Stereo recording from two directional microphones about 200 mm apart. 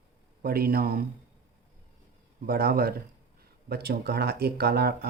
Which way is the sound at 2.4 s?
50° right (ahead or behind).